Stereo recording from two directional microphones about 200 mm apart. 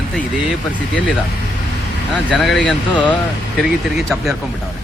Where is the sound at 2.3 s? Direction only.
Centre (ahead or behind).